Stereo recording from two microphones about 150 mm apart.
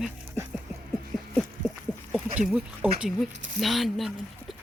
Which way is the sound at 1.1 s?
Centre (ahead or behind).